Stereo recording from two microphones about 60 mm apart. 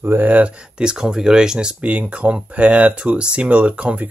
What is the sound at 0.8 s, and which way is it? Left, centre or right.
Speech, centre.